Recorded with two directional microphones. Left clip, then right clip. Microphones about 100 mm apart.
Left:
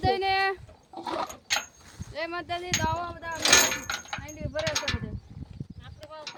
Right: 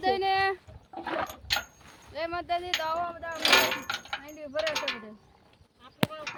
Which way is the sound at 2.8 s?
35° right (ahead or behind).